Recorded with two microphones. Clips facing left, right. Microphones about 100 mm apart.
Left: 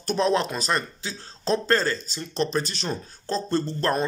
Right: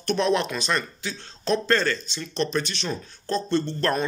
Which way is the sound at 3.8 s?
25° left (ahead or behind).